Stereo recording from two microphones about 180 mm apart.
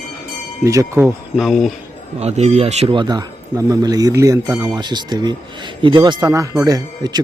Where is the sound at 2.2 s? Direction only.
35° right (ahead or behind).